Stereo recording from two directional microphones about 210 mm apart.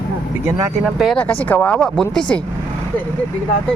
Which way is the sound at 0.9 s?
Centre (ahead or behind).